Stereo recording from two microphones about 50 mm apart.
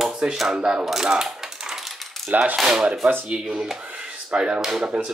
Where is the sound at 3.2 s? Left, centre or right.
Centre.